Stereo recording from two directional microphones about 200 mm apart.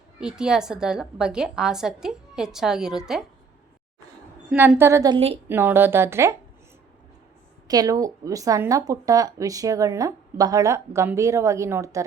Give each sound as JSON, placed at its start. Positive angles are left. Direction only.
{"t": 0.2, "sound": "a woman's voice", "side_deg": -5}
{"t": 4.4, "sound": "speech", "side_deg": -10}
{"t": 5.5, "sound": "speech", "side_deg": -10}
{"t": 7.7, "sound": "speech", "side_deg": -20}